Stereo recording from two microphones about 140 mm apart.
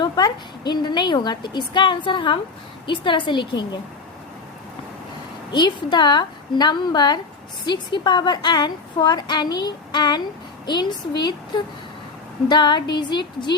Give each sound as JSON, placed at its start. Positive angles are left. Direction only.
{"t": 0.0, "sound": "a woman's voice", "side_deg": 30}
{"t": 5.5, "sound": "a woman's voice", "side_deg": 30}